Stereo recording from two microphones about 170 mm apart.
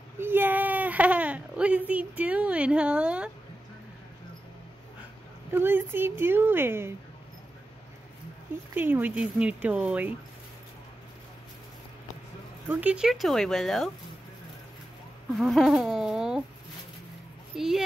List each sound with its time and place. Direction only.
0.2 s speech: 10° right (ahead or behind)
5.5 s a woman's voice: 10° right (ahead or behind)
8.7 s a woman's voice: 10° right (ahead or behind)
12.6 s speech: 5° right (ahead or behind)
15.3 s speech: centre (ahead or behind)
17.6 s speech: centre (ahead or behind)